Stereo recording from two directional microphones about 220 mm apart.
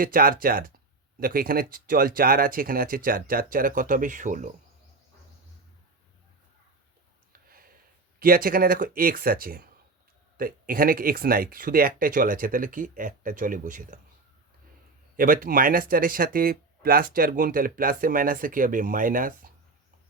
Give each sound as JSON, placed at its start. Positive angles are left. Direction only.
{"t": 0.0, "sound": "speech", "side_deg": -40}
{"t": 8.2, "sound": "speech", "side_deg": -40}
{"t": 15.1, "sound": "speech", "side_deg": -40}